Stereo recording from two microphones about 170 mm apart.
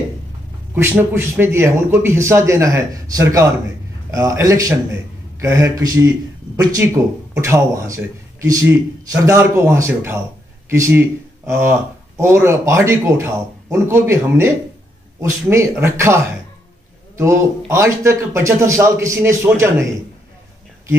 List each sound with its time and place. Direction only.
0.7 s a man's voice: 15° right (ahead or behind)
17.2 s a man's voice: 15° right (ahead or behind)